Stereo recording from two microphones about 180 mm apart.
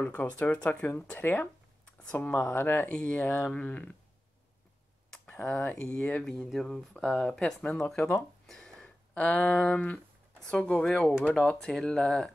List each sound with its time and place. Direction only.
0.0 s speech: 10° left (ahead or behind)
5.2 s speech: 10° left (ahead or behind)